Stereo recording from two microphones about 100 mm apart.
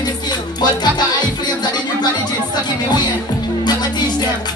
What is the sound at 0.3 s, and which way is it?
Music, 45° left (ahead or behind).